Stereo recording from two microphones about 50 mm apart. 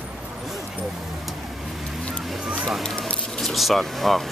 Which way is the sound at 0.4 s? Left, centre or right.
Centre.